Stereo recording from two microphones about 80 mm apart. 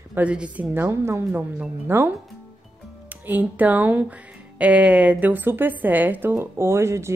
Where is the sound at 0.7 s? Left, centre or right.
Right.